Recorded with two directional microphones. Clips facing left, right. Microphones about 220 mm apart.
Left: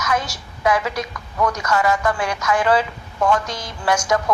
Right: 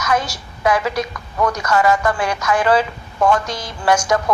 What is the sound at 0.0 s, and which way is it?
A woman's voice, 35° right (ahead or behind).